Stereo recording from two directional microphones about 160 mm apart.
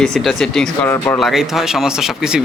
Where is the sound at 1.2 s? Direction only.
Centre (ahead or behind).